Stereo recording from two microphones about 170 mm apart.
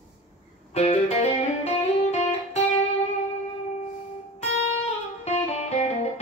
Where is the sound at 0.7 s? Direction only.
40° left (ahead or behind).